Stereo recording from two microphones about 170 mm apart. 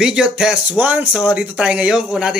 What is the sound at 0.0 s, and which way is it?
Speech, 5° right (ahead or behind).